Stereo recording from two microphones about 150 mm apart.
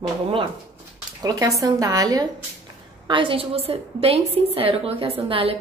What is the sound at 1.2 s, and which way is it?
A woman's voice, 20° right (ahead or behind).